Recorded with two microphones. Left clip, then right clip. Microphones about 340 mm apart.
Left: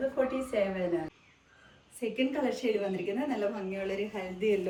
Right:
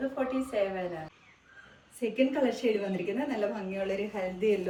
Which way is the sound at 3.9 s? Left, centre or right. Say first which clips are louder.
Right 2 dB; centre.